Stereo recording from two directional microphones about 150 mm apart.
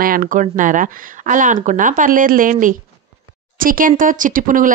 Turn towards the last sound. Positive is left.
turn(degrees=-65)  # may be behind; listen again after turning